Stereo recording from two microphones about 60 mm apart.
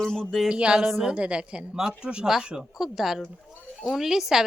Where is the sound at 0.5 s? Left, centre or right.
Centre.